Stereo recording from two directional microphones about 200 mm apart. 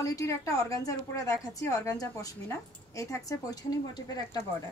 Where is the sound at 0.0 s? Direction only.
15° left (ahead or behind).